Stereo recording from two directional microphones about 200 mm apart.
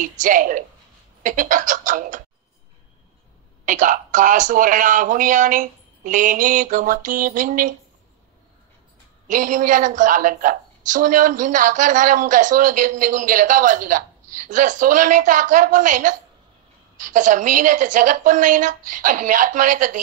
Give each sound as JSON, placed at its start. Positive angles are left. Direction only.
{"t": 0.0, "sound": "a woman's voice", "side_deg": -40}
{"t": 3.6, "sound": "a woman's voice", "side_deg": -40}
{"t": 9.3, "sound": "a woman's voice", "side_deg": -40}